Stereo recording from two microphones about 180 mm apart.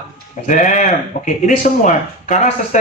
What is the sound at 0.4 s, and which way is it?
Speech, 45° left (ahead or behind).